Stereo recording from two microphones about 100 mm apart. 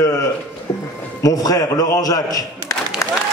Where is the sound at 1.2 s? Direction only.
35° left (ahead or behind).